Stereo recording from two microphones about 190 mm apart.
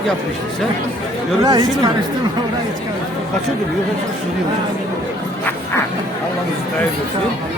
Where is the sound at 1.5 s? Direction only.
20° right (ahead or behind).